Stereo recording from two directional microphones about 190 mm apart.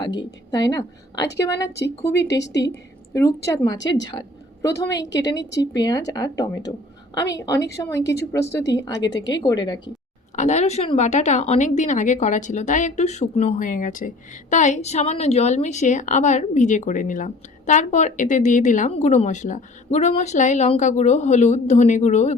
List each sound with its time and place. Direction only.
0.0 s a woman's voice: 25° left (ahead or behind)
1.5 s a woman's voice: 60° left (ahead or behind)
3.1 s a woman's voice: 15° left (ahead or behind)
10.3 s a woman's voice: 35° left (ahead or behind)